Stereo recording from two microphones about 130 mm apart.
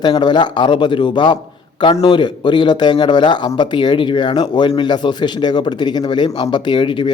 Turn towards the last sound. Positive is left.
turn(degrees=40)  # may be behind; listen again after turning